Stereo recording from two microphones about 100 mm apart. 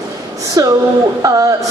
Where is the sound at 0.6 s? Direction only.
35° right (ahead or behind).